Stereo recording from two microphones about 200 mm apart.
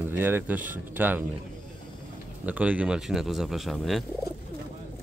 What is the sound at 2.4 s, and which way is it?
Speech, 5° right (ahead or behind).